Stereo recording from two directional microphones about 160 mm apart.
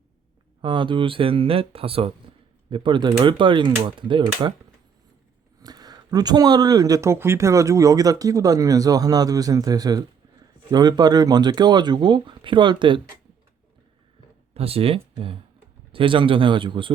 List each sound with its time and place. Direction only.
0.6 s speech: 30° right (ahead or behind)
5.6 s speech: 25° right (ahead or behind)
14.5 s speech: 40° right (ahead or behind)